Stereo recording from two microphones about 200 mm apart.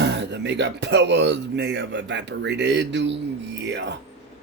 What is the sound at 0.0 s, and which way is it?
Speech, 60° right (ahead or behind).